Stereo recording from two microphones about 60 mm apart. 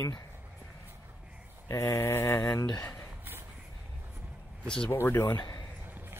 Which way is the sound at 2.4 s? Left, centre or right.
Left.